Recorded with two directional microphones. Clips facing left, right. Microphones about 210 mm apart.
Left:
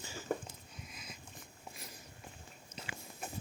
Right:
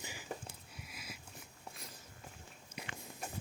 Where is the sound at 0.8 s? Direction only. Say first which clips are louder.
Even; 5° right (ahead or behind).